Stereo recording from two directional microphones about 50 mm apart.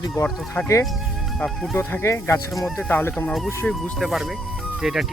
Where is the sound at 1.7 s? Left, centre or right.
Left.